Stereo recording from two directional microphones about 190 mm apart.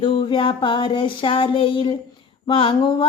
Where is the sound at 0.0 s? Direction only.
25° left (ahead or behind).